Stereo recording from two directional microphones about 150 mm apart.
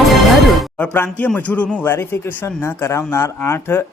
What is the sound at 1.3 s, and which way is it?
Speech, 10° left (ahead or behind).